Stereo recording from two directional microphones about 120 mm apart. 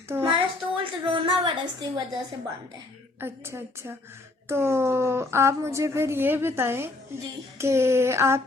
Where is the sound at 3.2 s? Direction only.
20° right (ahead or behind).